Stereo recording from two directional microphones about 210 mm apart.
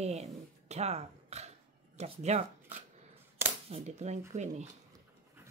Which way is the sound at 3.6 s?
30° right (ahead or behind).